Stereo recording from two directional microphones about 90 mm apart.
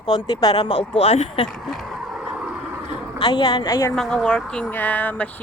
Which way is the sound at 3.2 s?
55° left (ahead or behind).